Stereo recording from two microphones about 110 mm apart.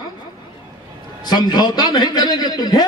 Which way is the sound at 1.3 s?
40° left (ahead or behind).